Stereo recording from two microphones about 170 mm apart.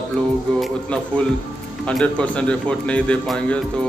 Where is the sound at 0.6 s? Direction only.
5° left (ahead or behind).